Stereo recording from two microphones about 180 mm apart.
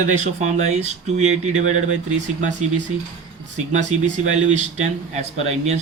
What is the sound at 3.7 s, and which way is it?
Speech, 40° right (ahead or behind).